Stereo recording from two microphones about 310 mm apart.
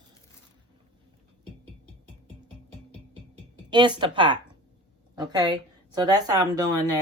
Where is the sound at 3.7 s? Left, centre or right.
Centre.